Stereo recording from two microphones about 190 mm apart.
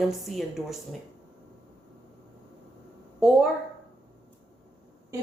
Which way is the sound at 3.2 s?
Centre (ahead or behind).